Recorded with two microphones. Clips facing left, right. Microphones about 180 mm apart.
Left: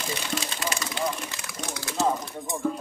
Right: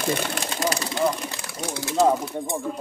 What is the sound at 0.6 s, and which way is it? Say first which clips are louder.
Vehicle: right 7 dB; 35° right (ahead or behind).